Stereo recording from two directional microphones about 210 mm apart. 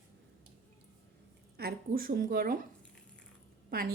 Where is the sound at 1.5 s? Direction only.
45° right (ahead or behind).